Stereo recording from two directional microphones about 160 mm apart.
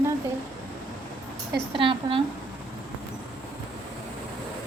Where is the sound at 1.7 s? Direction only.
35° right (ahead or behind).